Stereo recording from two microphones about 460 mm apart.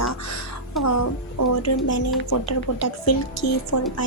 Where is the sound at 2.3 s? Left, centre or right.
Left.